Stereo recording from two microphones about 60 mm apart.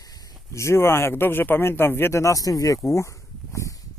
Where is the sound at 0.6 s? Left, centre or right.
Left.